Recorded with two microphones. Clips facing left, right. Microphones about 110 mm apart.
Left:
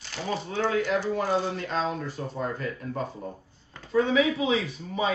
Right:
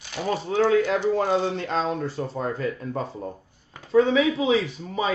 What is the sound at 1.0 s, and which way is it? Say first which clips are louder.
Speech: right 4 dB; 25° right (ahead or behind).